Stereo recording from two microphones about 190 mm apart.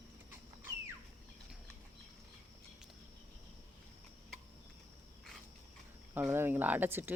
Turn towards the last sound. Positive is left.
turn(degrees=-10)  # may be behind; listen again after turning